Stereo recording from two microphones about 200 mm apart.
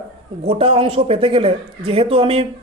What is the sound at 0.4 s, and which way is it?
Speech, 30° right (ahead or behind).